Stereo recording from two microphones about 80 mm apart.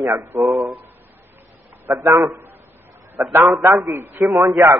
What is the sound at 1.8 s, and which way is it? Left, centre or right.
Speech, right.